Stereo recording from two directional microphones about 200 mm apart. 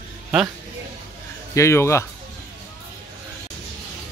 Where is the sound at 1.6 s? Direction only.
15° left (ahead or behind).